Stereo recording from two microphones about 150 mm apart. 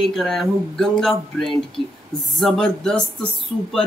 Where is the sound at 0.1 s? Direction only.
Centre (ahead or behind).